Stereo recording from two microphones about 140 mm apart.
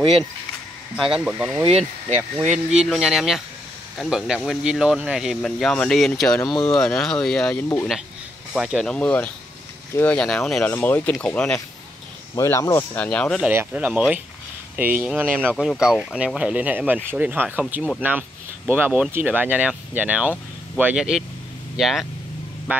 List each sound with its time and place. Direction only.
0.9 s speech: 5° right (ahead or behind)
1.7 s speech: 45° right (ahead or behind)
2.7 s speech: 5° right (ahead or behind); by 7.9 s 15° left (ahead or behind)
8.5 s speech: centre (ahead or behind)
12.4 s speech: 20° left (ahead or behind)
13.4 s speech: 10° right (ahead or behind)
15.5 s speech: centre (ahead or behind)
22.7 s music: 10° right (ahead or behind)